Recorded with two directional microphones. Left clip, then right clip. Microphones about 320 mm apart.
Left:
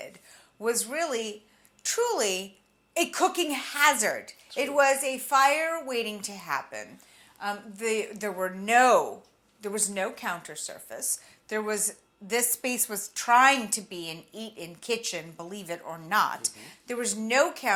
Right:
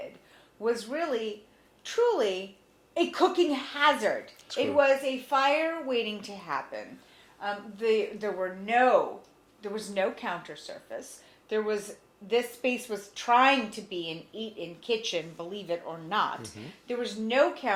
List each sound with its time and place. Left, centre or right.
0.6 s a woman's voice: left
4.5 s a woman's voice: left
9.6 s a woman's voice: left
16.8 s speech: left